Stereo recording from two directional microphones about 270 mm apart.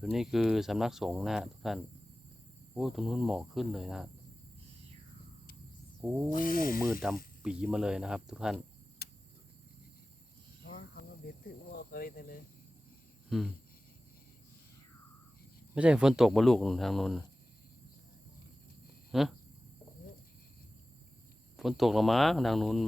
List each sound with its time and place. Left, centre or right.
0.0 s speech: centre
6.0 s speech: centre
6.3 s speech: left
7.0 s speech: centre
9.0 s cricket: left
10.7 s cricket: left
11.7 s speech: left
13.3 s speech: centre
15.7 s speech: centre
19.1 s speech: centre
21.5 s speech: centre